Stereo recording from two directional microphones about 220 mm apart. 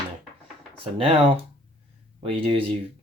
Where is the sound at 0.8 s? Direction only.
25° right (ahead or behind).